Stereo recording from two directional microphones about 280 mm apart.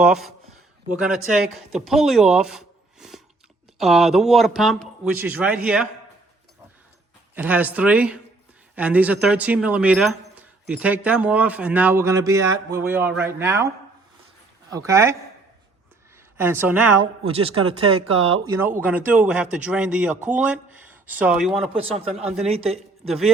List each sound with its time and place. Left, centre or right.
0.0 s speech: centre
7.3 s speech: centre
14.7 s speech: centre
16.4 s speech: centre
17.2 s speech: centre
17.8 s speech: right
18.2 s speech: centre
21.7 s speech: right
22.2 s speech: centre
22.4 s speech: right
23.0 s speech: centre